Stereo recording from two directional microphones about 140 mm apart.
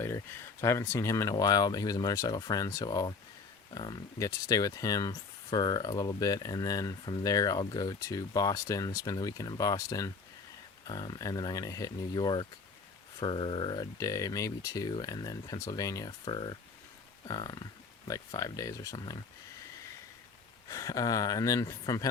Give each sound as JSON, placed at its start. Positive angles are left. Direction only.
{"t": 0.6, "sound": "speech", "side_deg": 20}
{"t": 20.7, "sound": "speech", "side_deg": 25}